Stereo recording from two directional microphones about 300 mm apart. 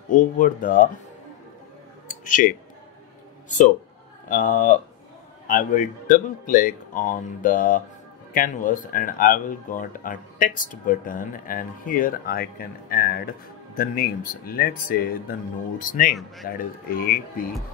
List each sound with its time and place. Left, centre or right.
0.1 s speech: left
2.0 s clicking: left
4.3 s speech: left